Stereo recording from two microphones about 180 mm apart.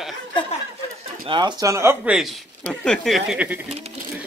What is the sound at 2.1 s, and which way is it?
Speech, centre (ahead or behind).